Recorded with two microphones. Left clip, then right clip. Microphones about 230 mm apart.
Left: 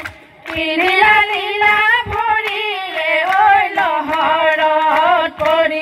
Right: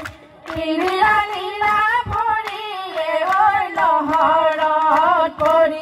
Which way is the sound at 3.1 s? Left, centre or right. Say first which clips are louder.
Left 4 dB; left.